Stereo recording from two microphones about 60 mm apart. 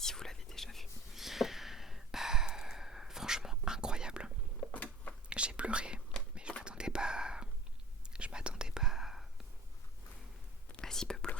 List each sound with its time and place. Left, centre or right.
0.0 s whispering: centre
4.7 s a sound: left
5.3 s whispering: centre
10.7 s whispering: centre